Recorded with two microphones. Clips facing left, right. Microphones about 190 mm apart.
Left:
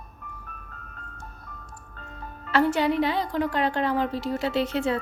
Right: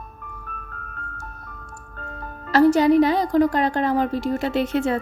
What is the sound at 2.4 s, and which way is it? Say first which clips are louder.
A woman's voice: right 7 dB; 40° right (ahead or behind).